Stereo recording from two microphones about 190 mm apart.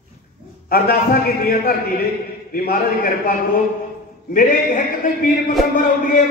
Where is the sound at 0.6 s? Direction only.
50° left (ahead or behind).